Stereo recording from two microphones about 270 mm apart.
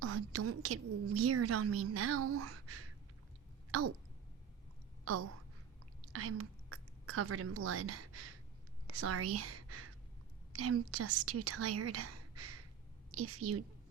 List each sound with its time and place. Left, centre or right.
0.0 s a woman's voice: right
6.1 s a woman's voice: right